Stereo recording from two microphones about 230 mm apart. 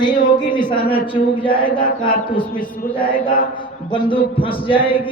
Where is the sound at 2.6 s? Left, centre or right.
Left.